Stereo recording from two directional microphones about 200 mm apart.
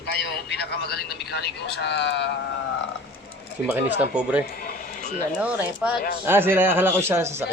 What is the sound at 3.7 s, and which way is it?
Speech, 5° right (ahead or behind).